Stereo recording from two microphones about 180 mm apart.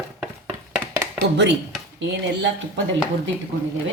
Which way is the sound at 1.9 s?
85° right.